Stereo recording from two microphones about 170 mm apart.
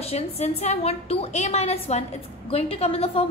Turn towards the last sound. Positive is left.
turn(degrees=35)  # may be behind; listen again after turning